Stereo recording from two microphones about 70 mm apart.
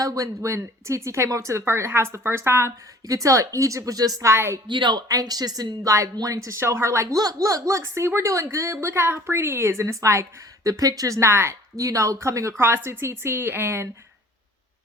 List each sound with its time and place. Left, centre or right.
0.0 s speech: right
3.1 s speech: right
4.2 s a woman's voice: right
4.8 s speech: right
7.2 s speech: right
7.8 s a woman's voice: right
11.8 s speech: right
12.5 s a woman's voice: right